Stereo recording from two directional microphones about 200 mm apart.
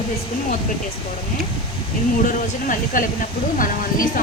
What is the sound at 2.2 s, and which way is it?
A woman's voice, 40° left (ahead or behind).